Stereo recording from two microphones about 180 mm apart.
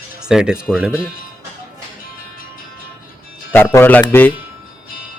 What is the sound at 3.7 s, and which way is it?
Speech, 10° left (ahead or behind).